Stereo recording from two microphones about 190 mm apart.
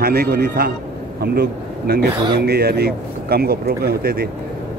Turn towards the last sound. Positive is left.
turn(degrees=-55)  # may be behind; listen again after turning